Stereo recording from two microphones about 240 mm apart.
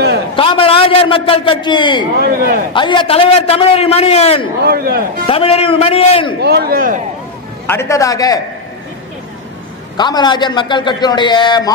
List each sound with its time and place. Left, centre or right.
0.4 s a man's voice: left
2.2 s speech: right
2.7 s a man's voice: centre
4.6 s speech: right
5.2 s a man's voice: left
6.4 s speech: right
7.6 s a man's voice: centre
9.9 s a man's voice: centre